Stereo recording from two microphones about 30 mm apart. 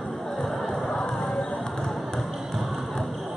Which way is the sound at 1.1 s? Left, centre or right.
Centre.